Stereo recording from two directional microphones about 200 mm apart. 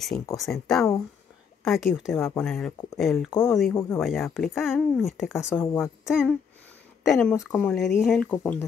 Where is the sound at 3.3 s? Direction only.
15° left (ahead or behind).